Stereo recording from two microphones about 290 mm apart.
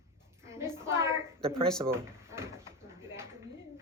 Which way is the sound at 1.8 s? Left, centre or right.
Centre.